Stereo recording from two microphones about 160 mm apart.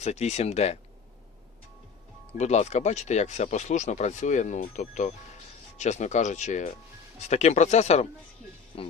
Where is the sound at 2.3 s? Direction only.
45° left (ahead or behind).